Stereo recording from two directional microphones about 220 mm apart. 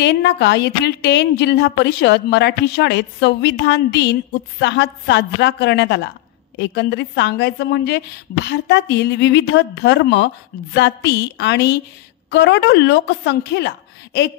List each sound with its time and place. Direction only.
0.0 s a woman's voice: 50° left (ahead or behind)